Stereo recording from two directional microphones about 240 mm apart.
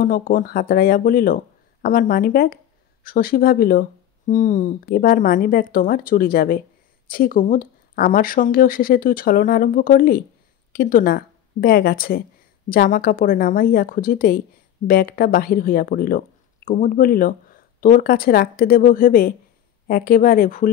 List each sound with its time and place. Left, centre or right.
0.0 s speech: left